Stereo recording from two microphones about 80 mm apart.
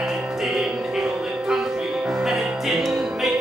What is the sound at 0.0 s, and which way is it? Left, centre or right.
Music, centre.